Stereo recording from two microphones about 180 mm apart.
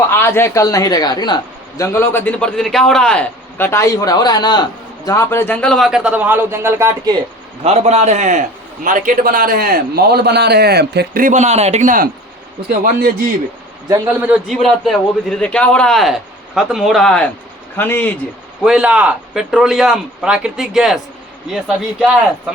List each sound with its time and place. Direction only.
0.1 s a man's voice: 15° left (ahead or behind); by 7.1 s 15° right (ahead or behind)
7.6 s a man's voice: 35° right (ahead or behind)
12.6 s a man's voice: 55° right (ahead or behind)
13.8 s a man's voice: 20° right (ahead or behind)
14.1 s a man's voice: 10° right (ahead or behind); by 18.1 s 10° left (ahead or behind)
18.6 s a man's voice: 5° right (ahead or behind)